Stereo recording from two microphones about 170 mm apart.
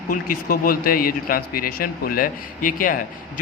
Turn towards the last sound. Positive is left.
turn(degrees=55)  # may be behind; listen again after turning